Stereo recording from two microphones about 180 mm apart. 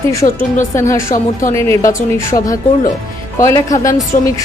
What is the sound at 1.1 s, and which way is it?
Speech, 45° left (ahead or behind).